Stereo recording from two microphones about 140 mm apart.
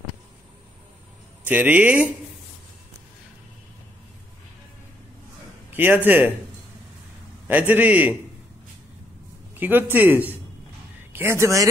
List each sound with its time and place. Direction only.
1.4 s speech: 10° right (ahead or behind)
5.7 s speech: 15° right (ahead or behind)
7.4 s speech: 10° right (ahead or behind)
9.6 s a man's voice: 15° right (ahead or behind)